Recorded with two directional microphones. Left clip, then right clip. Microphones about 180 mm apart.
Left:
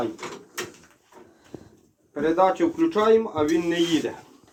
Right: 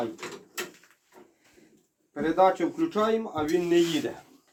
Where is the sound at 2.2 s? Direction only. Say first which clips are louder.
Left 2 dB; 30° right (ahead or behind).